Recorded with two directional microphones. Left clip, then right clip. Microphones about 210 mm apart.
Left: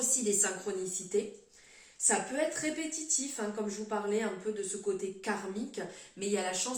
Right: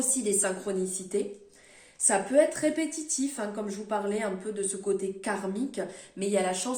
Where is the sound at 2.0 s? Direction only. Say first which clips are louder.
Right 8 dB; 55° right (ahead or behind).